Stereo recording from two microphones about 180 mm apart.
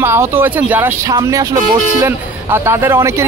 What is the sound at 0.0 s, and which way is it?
A man's voice, 15° right (ahead or behind).